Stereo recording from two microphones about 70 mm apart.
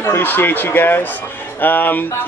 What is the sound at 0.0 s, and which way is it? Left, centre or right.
Speech, left.